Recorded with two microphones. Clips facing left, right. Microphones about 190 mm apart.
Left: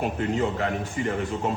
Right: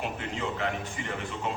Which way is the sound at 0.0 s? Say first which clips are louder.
Left 8 dB; 45° left (ahead or behind).